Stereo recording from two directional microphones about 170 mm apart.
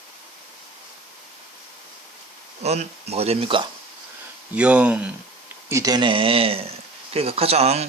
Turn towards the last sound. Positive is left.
turn(degrees=-40)  # may be behind; listen again after turning